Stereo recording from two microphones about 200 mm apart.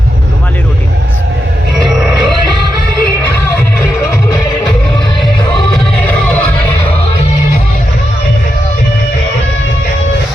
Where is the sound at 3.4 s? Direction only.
15° left (ahead or behind).